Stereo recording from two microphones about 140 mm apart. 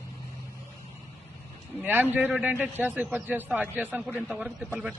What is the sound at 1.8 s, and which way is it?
A man's voice, 15° right (ahead or behind).